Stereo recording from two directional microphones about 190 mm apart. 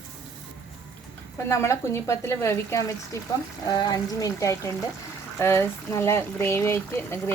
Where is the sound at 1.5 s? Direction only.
15° left (ahead or behind).